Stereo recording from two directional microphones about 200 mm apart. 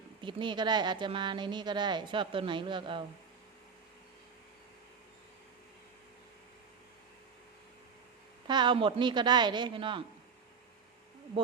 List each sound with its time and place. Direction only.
0.2 s speech: 25° right (ahead or behind)
8.4 s speech: 20° right (ahead or behind)